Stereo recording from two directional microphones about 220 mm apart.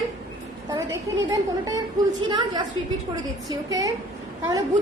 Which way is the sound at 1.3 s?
15° right (ahead or behind).